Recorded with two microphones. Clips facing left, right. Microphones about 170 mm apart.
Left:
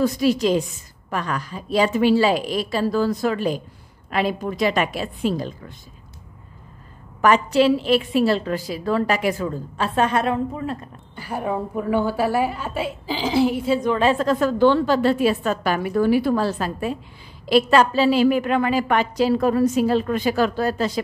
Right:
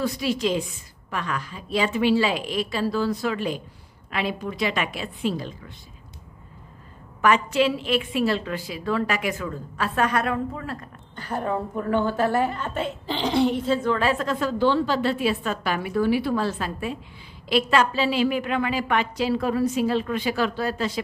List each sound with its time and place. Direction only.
0.0 s a woman's voice: 40° left (ahead or behind)
7.2 s a woman's voice: 40° left (ahead or behind); by 10.9 s 20° left (ahead or behind)
11.1 s a woman's voice: 10° left (ahead or behind)
14.2 s a woman's voice: 40° left (ahead or behind)
14.6 s a woman's voice: 50° left (ahead or behind)